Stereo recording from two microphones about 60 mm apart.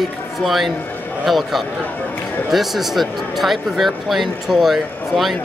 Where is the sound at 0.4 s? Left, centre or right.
Centre.